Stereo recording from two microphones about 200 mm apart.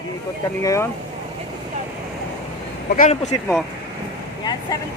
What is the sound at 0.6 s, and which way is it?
Speech, 15° left (ahead or behind).